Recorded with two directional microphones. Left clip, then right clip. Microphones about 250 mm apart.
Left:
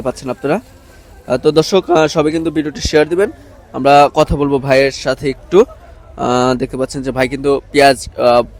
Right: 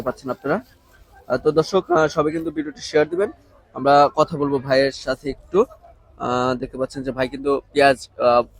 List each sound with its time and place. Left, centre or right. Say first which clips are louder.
0.0 s speech: left 6 dB; left